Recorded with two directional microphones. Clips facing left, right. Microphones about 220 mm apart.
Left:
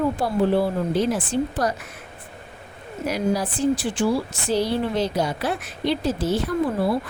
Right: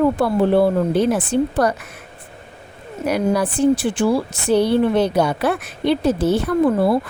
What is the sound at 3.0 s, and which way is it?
A woman's voice, 60° right (ahead or behind).